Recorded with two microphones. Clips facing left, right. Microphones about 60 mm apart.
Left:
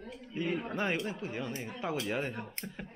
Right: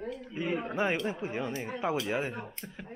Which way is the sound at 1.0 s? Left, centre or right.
Right.